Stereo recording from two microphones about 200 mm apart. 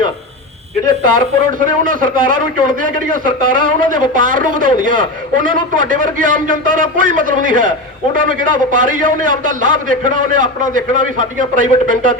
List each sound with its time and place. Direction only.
1.0 s a man's voice: 40° right (ahead or behind)